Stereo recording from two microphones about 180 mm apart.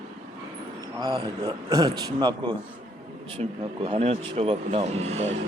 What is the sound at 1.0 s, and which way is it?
A man's voice, 25° right (ahead or behind).